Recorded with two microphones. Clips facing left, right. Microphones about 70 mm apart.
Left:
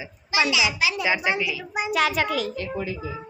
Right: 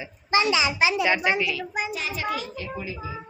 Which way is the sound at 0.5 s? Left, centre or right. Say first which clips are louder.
Right 1 dB; right.